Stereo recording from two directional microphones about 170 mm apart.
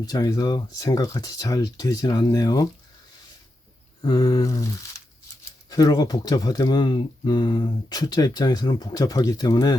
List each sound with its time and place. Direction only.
0.0 s speech: 20° left (ahead or behind)
4.0 s speech: 25° left (ahead or behind)
5.7 s speech: 20° left (ahead or behind)